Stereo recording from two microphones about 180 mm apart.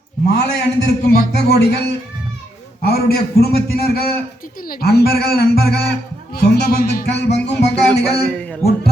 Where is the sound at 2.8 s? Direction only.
60° left (ahead or behind).